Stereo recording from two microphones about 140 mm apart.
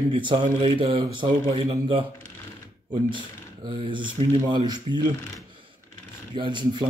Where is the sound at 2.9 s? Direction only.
35° right (ahead or behind).